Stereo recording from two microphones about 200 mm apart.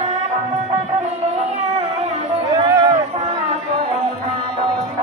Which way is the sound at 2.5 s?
20° right (ahead or behind).